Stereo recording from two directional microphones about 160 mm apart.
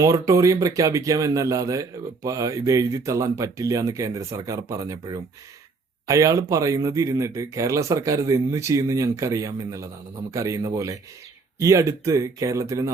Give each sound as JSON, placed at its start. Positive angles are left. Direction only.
{"t": 0.0, "sound": "speech", "side_deg": -20}